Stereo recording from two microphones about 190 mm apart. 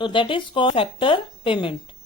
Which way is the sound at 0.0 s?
25° left (ahead or behind).